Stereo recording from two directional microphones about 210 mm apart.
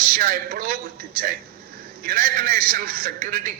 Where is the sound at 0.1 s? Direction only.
40° right (ahead or behind).